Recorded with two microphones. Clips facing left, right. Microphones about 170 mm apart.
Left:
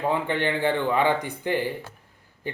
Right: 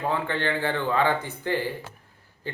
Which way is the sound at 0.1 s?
15° left (ahead or behind).